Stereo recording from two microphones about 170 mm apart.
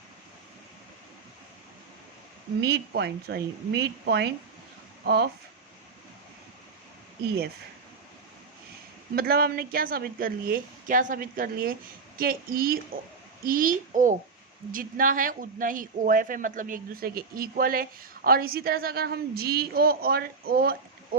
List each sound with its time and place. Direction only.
2.6 s speech: 70° right (ahead or behind)
9.1 s a child's voice: 65° right (ahead or behind)